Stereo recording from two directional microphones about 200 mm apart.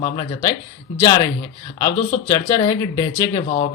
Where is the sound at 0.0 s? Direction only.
20° left (ahead or behind).